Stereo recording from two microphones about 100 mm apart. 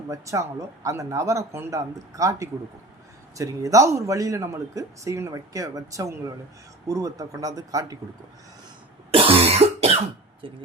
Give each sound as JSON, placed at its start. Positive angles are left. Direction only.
{"t": 0.1, "sound": "a man's voice", "side_deg": -30}
{"t": 9.1, "sound": "cough", "side_deg": -70}
{"t": 10.4, "sound": "speech", "side_deg": -60}